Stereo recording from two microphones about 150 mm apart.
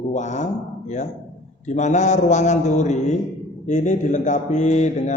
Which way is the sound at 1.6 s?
50° left (ahead or behind).